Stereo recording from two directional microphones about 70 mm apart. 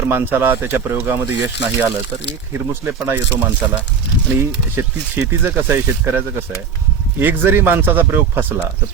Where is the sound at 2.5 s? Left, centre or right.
Right.